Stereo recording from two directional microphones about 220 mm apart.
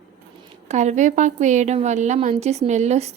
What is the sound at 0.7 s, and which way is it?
A woman's voice, 30° right (ahead or behind).